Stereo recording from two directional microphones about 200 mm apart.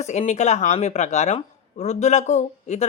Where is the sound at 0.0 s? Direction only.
35° left (ahead or behind).